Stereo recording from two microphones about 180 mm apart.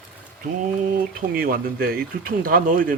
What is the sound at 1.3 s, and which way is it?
Speech, 55° right (ahead or behind).